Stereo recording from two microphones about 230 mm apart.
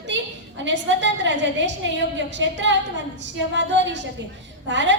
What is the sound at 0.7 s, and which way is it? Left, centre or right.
Speech, right.